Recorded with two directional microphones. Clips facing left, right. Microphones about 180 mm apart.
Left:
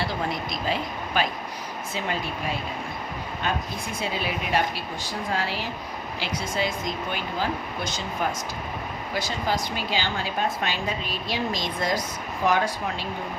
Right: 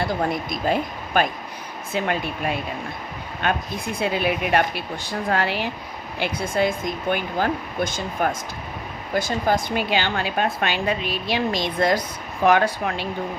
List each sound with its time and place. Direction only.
0.5 s a woman's voice: 50° right (ahead or behind)